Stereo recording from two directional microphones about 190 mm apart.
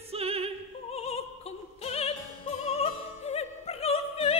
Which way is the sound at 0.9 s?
30° left (ahead or behind).